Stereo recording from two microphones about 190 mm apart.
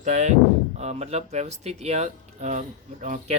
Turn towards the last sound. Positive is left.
turn(degrees=-40)  # may be behind; listen again after turning